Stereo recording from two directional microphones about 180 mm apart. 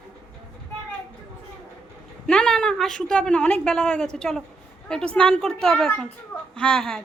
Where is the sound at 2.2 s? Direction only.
5° left (ahead or behind).